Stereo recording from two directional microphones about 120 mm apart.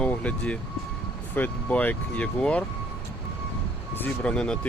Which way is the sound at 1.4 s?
15° left (ahead or behind).